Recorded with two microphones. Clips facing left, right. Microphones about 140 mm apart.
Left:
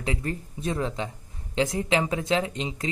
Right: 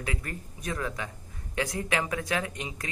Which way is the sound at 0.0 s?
25° left (ahead or behind).